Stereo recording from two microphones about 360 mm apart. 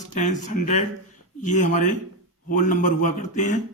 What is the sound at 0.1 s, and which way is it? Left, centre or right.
A man's voice, left.